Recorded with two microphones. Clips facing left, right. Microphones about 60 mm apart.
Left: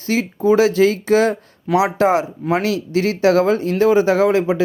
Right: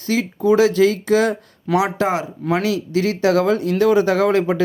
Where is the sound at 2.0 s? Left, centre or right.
Left.